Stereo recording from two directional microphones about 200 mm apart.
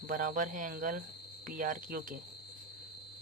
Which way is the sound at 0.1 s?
40° right (ahead or behind).